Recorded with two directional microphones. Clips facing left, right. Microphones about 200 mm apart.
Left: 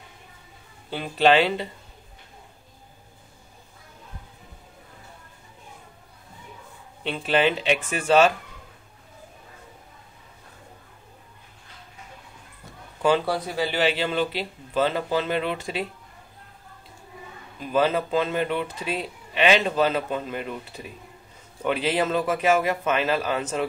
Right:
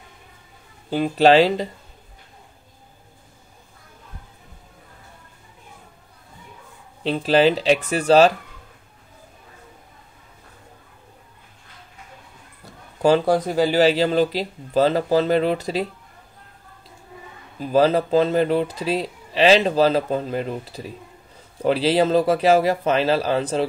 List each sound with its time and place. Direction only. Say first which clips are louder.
0.8 s speech: right 5 dB; 40° right (ahead or behind)
7.0 s speech: right 6 dB; 35° right (ahead or behind)
13.0 s speech: right 5 dB; 40° right (ahead or behind)
17.6 s speech: right 5 dB; 35° right (ahead or behind)